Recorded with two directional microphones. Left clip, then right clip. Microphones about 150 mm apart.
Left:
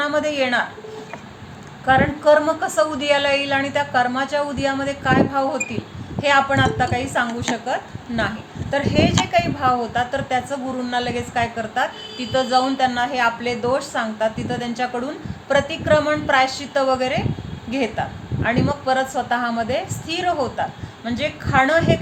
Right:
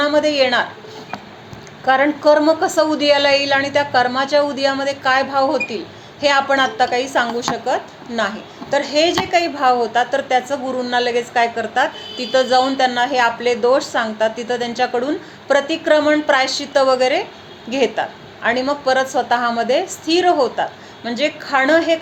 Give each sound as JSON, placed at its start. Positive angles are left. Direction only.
{"t": 0.0, "sound": "a woman's voice", "side_deg": -35}
{"t": 1.8, "sound": "a woman's voice", "side_deg": -35}